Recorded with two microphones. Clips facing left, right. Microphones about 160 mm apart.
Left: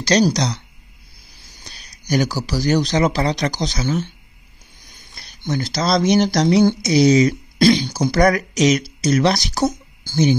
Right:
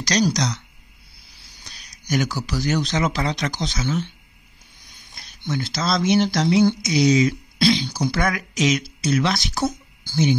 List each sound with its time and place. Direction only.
0.0 s speech: 30° left (ahead or behind)
1.3 s speech: 45° left (ahead or behind)